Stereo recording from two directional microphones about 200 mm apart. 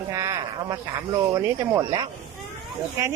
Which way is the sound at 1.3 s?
15° right (ahead or behind).